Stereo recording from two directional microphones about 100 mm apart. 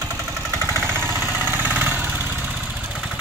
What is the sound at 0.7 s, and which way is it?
Vehicle, 25° right (ahead or behind).